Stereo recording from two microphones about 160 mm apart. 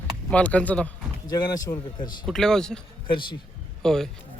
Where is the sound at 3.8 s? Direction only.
5° left (ahead or behind).